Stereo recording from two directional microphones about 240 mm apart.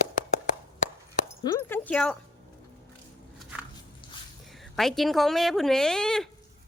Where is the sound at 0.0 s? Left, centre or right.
Left.